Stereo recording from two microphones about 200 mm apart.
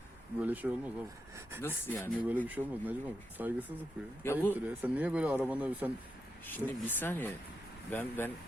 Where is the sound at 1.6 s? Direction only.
10° left (ahead or behind).